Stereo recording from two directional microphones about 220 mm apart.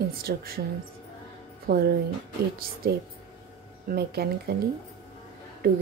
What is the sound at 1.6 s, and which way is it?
Speech, 45° right (ahead or behind).